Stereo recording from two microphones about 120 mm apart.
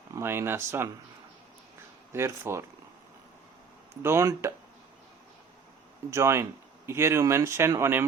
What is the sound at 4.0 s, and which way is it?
Speech, 20° right (ahead or behind).